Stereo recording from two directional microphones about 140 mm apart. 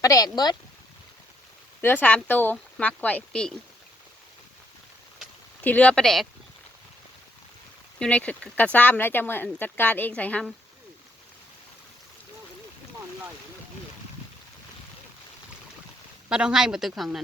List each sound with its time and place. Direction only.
0.0 s speech: 25° left (ahead or behind)
1.8 s speech: 10° left (ahead or behind)
5.6 s speech: 10° left (ahead or behind)
7.9 s speech: 10° left (ahead or behind)
16.3 s a woman's voice: 5° right (ahead or behind)